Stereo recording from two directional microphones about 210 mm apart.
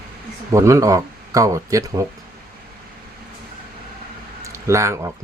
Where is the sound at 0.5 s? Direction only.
15° right (ahead or behind).